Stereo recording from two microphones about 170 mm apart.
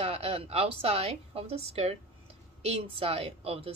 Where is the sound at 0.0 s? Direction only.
35° right (ahead or behind).